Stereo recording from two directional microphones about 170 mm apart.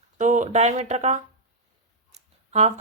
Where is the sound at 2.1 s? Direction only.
40° right (ahead or behind).